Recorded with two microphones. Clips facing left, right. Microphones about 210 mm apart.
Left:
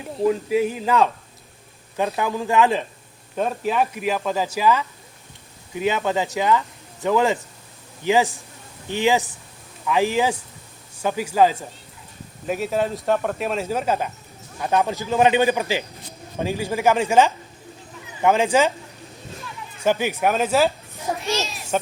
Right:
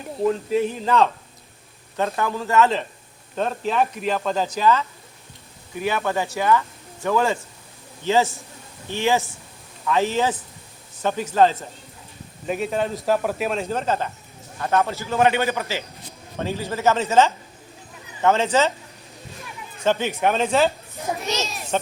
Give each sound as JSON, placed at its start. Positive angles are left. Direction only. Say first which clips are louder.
{"t": 0.2, "sound": "speech", "louder": "left 1 dB", "side_deg": 5}
{"t": 13.7, "sound": "speech", "louder": "left 1 dB", "side_deg": 10}
{"t": 19.8, "sound": "speech", "louder": "even", "side_deg": 10}